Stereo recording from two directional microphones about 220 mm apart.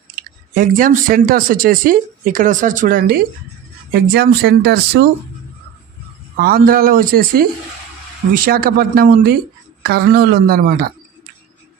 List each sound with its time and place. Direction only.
0.1 s speech: 40° right (ahead or behind)
6.3 s speech: 45° right (ahead or behind)